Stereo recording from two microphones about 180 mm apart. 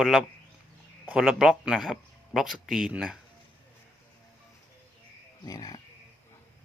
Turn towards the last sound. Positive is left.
turn(degrees=20)  # may be behind; listen again after turning